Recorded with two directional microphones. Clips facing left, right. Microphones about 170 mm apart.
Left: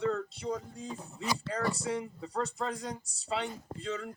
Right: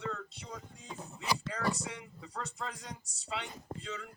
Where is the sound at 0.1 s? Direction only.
35° left (ahead or behind).